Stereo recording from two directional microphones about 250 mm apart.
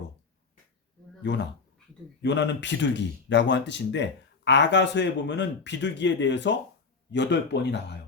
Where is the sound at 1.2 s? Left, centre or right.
Left.